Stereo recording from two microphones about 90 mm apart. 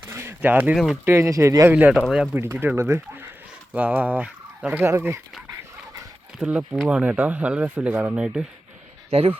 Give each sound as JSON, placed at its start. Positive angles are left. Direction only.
{"t": 0.1, "sound": "a sound", "side_deg": -25}
{"t": 0.4, "sound": "speech", "side_deg": -15}
{"t": 1.0, "sound": "speech", "side_deg": -30}
{"t": 1.9, "sound": "speech", "side_deg": -5}
{"t": 2.3, "sound": "speech", "side_deg": -25}
{"t": 3.8, "sound": "speech", "side_deg": -15}
{"t": 4.9, "sound": "speech", "side_deg": -30}
{"t": 6.4, "sound": "speech", "side_deg": -15}
{"t": 8.1, "sound": "speech", "side_deg": -10}